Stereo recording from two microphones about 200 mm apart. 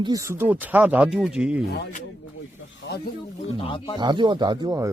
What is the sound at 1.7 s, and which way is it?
Speech, 55° left (ahead or behind).